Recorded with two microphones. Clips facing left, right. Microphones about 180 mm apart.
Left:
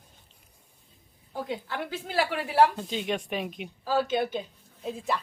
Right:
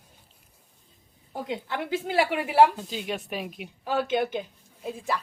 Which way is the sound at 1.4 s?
20° right (ahead or behind).